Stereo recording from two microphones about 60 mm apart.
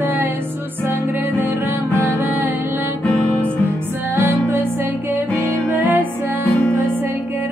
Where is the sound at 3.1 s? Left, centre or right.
Centre.